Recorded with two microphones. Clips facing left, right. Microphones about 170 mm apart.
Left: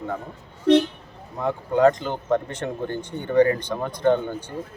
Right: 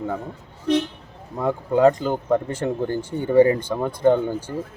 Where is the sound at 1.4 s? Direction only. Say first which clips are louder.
Right 1 dB; 10° right (ahead or behind).